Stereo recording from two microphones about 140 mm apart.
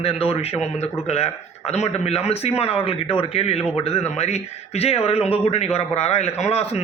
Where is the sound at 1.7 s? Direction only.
50° left (ahead or behind).